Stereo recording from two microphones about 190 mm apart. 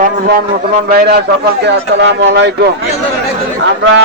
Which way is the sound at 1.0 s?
55° right (ahead or behind).